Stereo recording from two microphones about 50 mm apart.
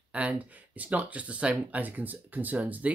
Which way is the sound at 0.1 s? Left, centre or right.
Right.